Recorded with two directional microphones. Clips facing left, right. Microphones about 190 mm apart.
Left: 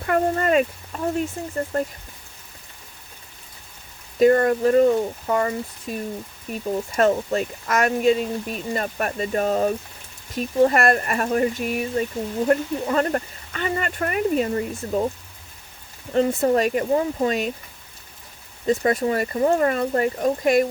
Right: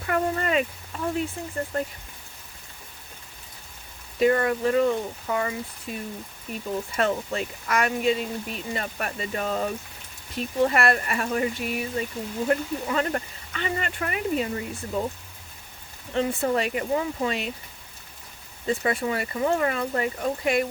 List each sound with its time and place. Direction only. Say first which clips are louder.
0.0 s speech: left 4 dB; 45° left (ahead or behind)
4.2 s speech: left 5 dB; 40° left (ahead or behind)
16.1 s speech: left 5 dB; 40° left (ahead or behind)
18.6 s speech: left 5 dB; 40° left (ahead or behind)